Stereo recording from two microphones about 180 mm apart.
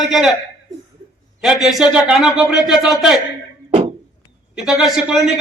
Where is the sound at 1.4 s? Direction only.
Centre (ahead or behind).